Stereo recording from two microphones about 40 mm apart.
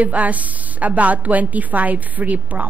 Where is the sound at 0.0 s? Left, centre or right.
Right.